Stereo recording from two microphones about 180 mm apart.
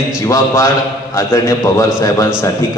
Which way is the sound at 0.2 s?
15° left (ahead or behind).